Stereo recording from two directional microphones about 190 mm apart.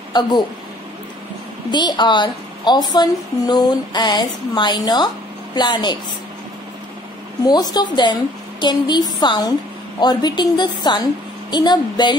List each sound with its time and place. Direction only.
0.1 s speech: 25° left (ahead or behind)
1.7 s a woman's voice: 25° left (ahead or behind)
7.4 s a woman's voice: 20° left (ahead or behind)